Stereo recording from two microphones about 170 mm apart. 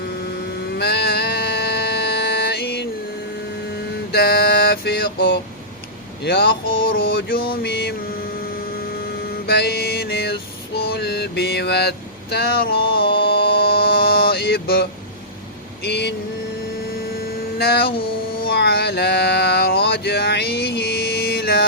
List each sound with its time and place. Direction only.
0.8 s music: 75° left (ahead or behind)
4.1 s music: 65° left (ahead or behind)
6.2 s mains hum: 75° left (ahead or behind)
6.9 s a sound: 60° left (ahead or behind)
9.5 s music: 70° left (ahead or behind)
10.8 s mantra: 70° left (ahead or behind)
15.8 s vehicle: 80° left
17.6 s mains hum: 70° left (ahead or behind)
18.4 s a sound: 70° left (ahead or behind)